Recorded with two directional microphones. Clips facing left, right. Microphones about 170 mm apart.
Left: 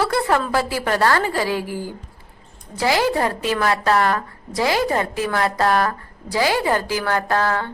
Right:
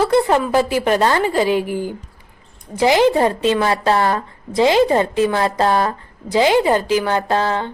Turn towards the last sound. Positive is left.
turn(degrees=-25)  # may be behind; listen again after turning